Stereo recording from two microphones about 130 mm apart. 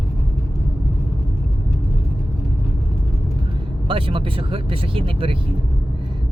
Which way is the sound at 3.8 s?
45° right (ahead or behind).